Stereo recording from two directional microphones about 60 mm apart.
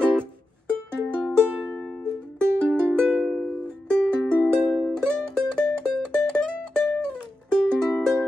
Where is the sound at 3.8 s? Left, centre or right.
Centre.